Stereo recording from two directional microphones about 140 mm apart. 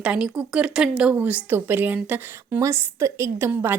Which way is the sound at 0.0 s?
5° right (ahead or behind).